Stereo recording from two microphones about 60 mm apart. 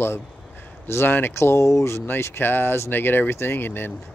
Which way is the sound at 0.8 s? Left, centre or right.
Left.